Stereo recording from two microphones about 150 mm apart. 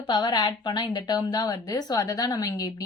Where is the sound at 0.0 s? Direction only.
30° left (ahead or behind).